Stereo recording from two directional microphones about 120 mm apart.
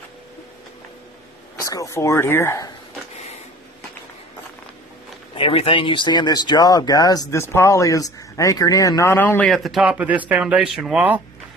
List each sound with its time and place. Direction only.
1.6 s speech: 25° left (ahead or behind)
5.3 s speech: 50° left (ahead or behind); by 9.5 s 15° left (ahead or behind)
9.5 s speech: centre (ahead or behind)
9.9 s speech: 15° right (ahead or behind)